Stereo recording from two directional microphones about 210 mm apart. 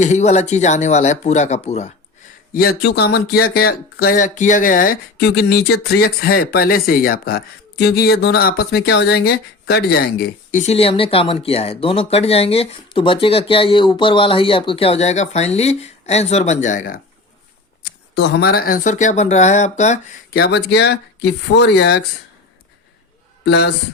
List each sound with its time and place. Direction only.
0.0 s speech: 35° left (ahead or behind)
2.5 s speech: 45° left (ahead or behind)
17.8 s speech: 55° left (ahead or behind); by 20.0 s 35° left (ahead or behind)
20.3 s speech: 50° left (ahead or behind)
23.5 s speech: 50° left (ahead or behind)